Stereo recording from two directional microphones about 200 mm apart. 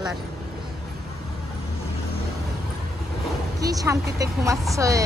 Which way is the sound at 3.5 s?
15° right (ahead or behind).